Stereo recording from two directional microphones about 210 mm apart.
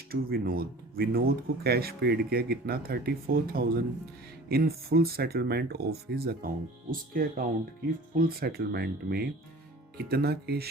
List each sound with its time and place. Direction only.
0.1 s speech: 45° right (ahead or behind)